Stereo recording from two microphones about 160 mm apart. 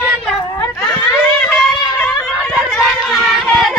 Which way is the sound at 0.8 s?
5° left (ahead or behind).